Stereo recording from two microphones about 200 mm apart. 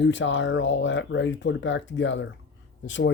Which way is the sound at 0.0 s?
65° left (ahead or behind).